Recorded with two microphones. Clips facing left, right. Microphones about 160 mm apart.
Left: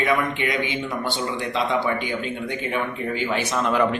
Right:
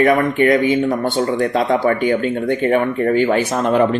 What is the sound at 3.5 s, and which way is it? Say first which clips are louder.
Speech: right 6 dB; 40° right (ahead or behind).